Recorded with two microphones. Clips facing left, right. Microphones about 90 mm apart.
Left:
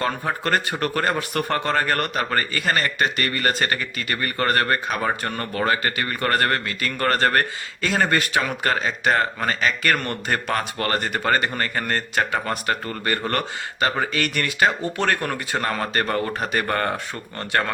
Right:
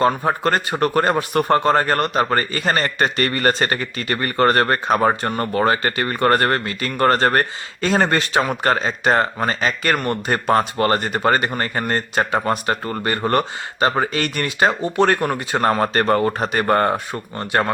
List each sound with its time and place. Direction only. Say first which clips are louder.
0.3 s a man's voice: right 4 dB; 25° right (ahead or behind)
15.6 s a man's voice: right 9 dB; 40° right (ahead or behind); by 17.7 s 20° right (ahead or behind)